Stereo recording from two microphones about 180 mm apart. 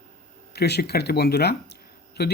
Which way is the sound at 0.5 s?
65° left (ahead or behind).